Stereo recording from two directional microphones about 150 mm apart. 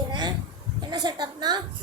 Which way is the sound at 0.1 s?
30° right (ahead or behind).